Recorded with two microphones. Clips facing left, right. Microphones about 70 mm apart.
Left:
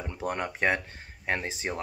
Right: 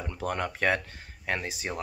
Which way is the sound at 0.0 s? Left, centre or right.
Left.